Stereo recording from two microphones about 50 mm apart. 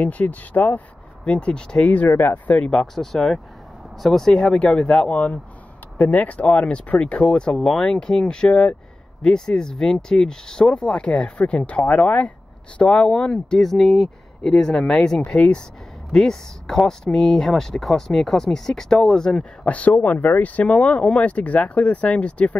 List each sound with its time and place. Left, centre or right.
0.0 s speech: left
1.2 s speech: left
1.9 s speech: left
2.6 s speech: centre
4.4 s speech: centre
7.5 s speech: centre
16.1 s speech: centre
19.6 s speech: left